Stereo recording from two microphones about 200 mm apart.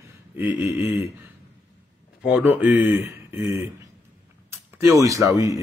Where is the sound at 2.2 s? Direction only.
5° right (ahead or behind).